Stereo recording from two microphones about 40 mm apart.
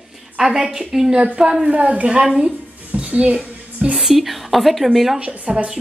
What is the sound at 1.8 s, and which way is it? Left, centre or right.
Speech, right.